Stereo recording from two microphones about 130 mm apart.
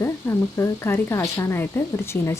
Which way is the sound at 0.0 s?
20° left (ahead or behind).